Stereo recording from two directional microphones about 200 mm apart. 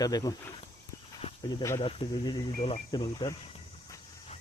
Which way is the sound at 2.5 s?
35° left (ahead or behind).